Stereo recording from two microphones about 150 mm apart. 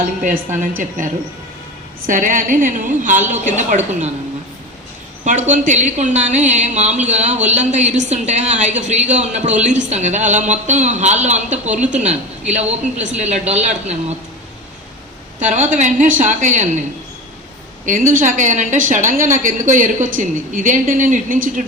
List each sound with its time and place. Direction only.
0.2 s a woman's voice: 60° right (ahead or behind)
2.0 s a woman's voice: 60° right (ahead or behind)
5.5 s speech: 55° right (ahead or behind)
15.4 s speech: 50° right (ahead or behind)
18.1 s a woman's voice: 60° right (ahead or behind)